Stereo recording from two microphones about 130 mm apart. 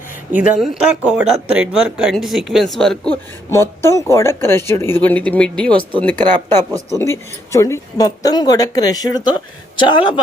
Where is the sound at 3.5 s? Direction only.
20° left (ahead or behind).